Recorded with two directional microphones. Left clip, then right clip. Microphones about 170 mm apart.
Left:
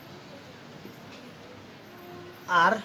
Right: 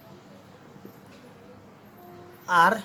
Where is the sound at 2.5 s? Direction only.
50° right (ahead or behind).